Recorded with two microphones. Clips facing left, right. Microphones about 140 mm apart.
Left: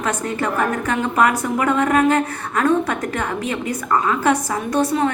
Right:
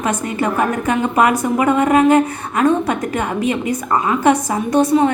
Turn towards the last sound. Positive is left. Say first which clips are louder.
# right 5 dB
turn(degrees=-20)  # may be behind; listen again after turning